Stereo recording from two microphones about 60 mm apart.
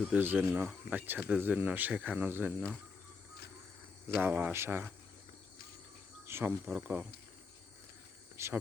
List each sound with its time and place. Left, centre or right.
0.1 s speech: right
4.0 s speech: right
4.5 s speech: right
6.2 s speech: right
8.4 s speech: right